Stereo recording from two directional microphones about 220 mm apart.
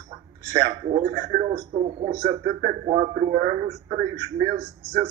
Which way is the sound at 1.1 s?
45° right (ahead or behind).